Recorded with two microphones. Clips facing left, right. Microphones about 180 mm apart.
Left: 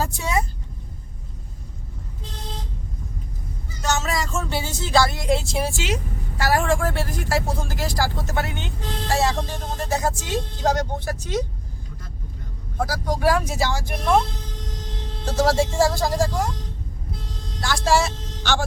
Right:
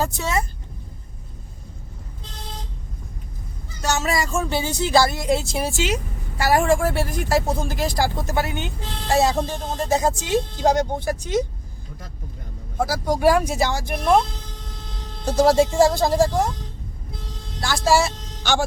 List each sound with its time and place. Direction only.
0.0 s speech: 10° left (ahead or behind)
3.8 s speech: 10° right (ahead or behind)
4.9 s a woman's voice: 5° right (ahead or behind)
6.4 s speech: 15° right (ahead or behind)
12.8 s speech: 10° right (ahead or behind)
15.2 s speech: 15° right (ahead or behind)
17.6 s speech: 5° right (ahead or behind)